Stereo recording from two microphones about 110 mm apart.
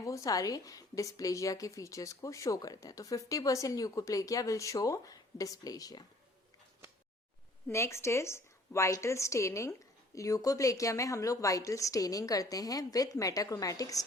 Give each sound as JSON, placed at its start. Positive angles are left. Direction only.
{"t": 0.0, "sound": "a woman's voice", "side_deg": 30}
{"t": 7.7, "sound": "a woman's voice", "side_deg": 25}